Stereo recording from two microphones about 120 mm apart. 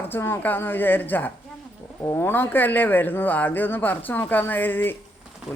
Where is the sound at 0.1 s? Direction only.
20° left (ahead or behind).